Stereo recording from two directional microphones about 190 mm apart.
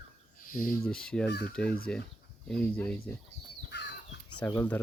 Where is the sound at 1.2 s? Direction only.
60° left (ahead or behind).